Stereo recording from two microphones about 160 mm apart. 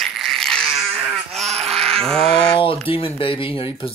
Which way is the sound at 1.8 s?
5° left (ahead or behind).